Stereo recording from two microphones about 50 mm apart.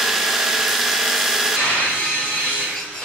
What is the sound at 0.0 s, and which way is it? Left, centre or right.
Tools, centre.